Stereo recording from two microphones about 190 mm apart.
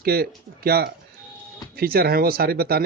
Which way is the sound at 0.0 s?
55° right (ahead or behind).